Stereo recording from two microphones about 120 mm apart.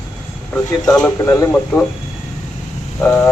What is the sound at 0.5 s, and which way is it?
Speech, 15° left (ahead or behind).